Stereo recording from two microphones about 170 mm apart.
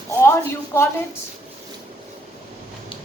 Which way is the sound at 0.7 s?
15° left (ahead or behind).